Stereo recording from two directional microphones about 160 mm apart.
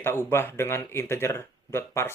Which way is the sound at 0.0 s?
15° left (ahead or behind).